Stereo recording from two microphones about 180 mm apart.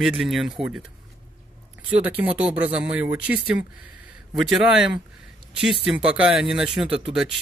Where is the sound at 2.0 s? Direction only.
5° right (ahead or behind).